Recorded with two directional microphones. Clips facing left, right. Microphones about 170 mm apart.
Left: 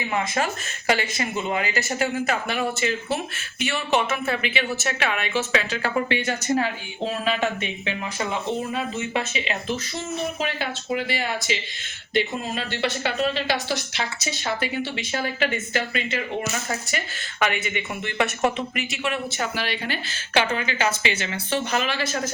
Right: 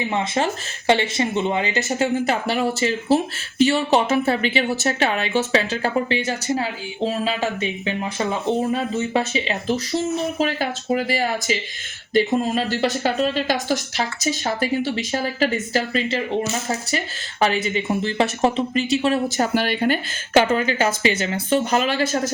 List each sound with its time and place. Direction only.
0.0 s speech: 25° right (ahead or behind); by 22.2 s 40° right (ahead or behind)